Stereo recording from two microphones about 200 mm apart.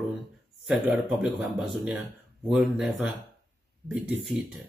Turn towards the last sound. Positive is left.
turn(degrees=0)  # may be behind; listen again after turning